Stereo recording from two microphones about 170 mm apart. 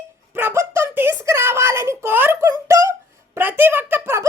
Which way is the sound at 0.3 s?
15° right (ahead or behind).